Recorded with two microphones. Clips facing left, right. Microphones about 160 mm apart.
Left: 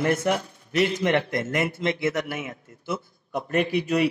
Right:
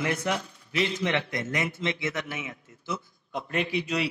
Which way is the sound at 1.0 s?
50° left (ahead or behind).